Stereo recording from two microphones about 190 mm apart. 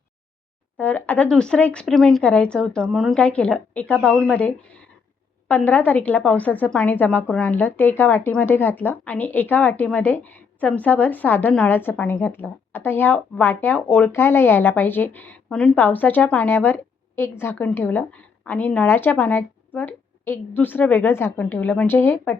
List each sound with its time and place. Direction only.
0.8 s a woman's voice: 10° left (ahead or behind)